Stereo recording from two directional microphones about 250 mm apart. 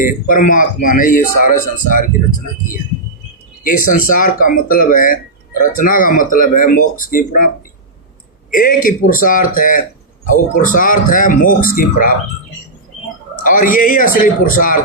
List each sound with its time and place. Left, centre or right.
0.0 s speech: left
3.6 s speech: left
13.4 s speech: left